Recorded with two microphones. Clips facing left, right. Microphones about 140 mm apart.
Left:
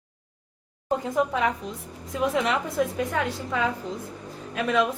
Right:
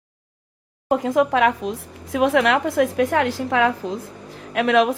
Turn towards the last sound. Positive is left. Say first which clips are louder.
# right 6 dB
turn(degrees=-80)